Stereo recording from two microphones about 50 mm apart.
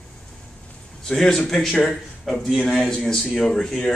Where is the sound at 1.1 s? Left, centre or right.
Centre.